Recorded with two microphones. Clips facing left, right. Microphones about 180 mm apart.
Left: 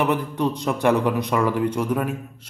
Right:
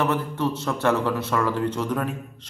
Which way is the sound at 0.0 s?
15° left (ahead or behind).